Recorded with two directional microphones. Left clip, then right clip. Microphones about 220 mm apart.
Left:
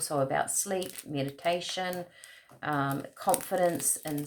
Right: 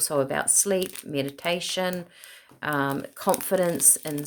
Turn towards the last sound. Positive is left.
turn(degrees=-50)  # may be behind; listen again after turning